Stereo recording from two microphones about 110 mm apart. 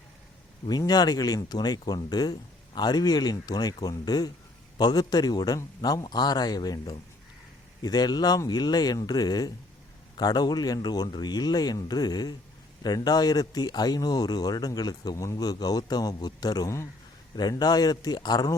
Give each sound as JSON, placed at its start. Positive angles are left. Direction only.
{"t": 0.7, "sound": "a man's voice", "side_deg": 35}